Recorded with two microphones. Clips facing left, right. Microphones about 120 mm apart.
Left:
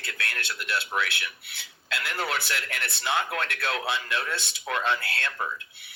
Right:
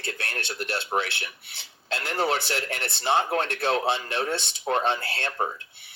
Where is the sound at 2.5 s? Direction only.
30° right (ahead or behind).